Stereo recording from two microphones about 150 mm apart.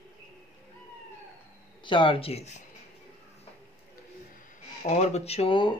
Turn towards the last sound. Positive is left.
turn(degrees=35)  # may be behind; listen again after turning